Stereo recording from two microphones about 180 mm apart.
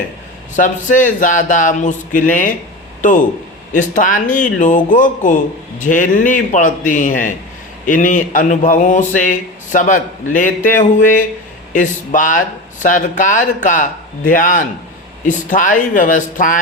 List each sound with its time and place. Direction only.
0.5 s speech: 45° left (ahead or behind)